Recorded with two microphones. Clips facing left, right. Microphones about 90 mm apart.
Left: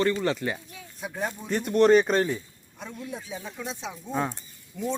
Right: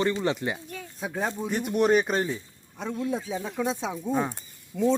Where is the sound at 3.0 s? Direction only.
30° right (ahead or behind).